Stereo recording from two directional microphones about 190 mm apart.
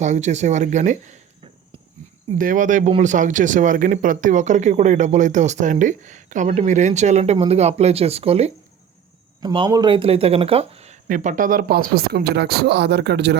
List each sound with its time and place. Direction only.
0.0 s speech: 40° right (ahead or behind)
2.4 s speech: 45° right (ahead or behind)
11.1 s speech: 45° right (ahead or behind); by 13.3 s 60° right (ahead or behind)